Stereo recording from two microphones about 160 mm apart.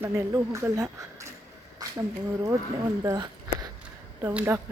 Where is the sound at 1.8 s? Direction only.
25° right (ahead or behind).